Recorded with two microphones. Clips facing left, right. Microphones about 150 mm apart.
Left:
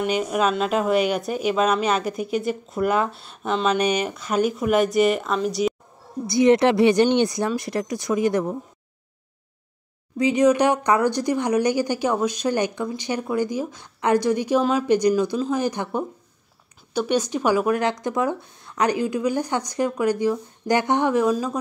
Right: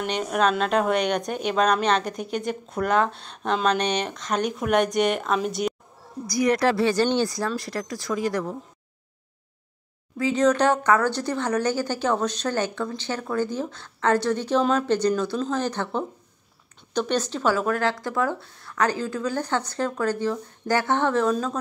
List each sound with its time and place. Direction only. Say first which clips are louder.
0.0 s speech: left 2 dB; 5° left (ahead or behind)
6.2 s speech: left 5 dB; 25° left (ahead or behind)
10.1 s speech: left 3 dB; 15° left (ahead or behind)